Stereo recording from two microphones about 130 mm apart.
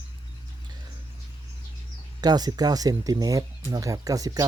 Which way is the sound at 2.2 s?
30° right (ahead or behind).